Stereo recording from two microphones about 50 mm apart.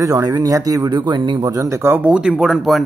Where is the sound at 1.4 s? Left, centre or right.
Right.